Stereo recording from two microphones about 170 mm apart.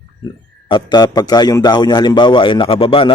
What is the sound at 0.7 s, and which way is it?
A man's voice, 25° left (ahead or behind).